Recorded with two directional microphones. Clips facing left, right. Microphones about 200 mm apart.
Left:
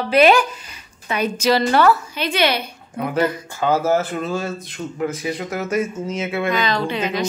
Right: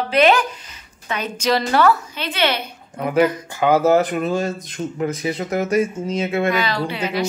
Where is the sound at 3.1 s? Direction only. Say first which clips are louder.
Right 4 dB; 15° right (ahead or behind).